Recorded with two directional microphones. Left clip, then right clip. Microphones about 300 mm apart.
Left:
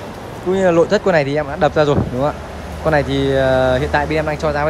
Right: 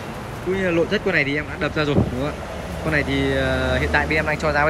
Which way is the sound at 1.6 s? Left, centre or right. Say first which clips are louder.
Left 10 dB; centre.